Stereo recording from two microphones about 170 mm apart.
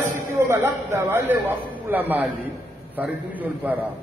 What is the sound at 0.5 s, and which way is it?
A man's voice, 15° right (ahead or behind).